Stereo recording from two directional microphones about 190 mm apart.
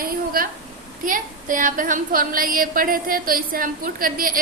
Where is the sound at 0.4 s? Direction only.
50° right (ahead or behind).